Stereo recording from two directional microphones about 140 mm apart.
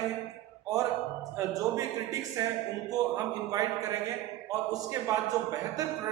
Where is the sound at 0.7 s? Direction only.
25° right (ahead or behind).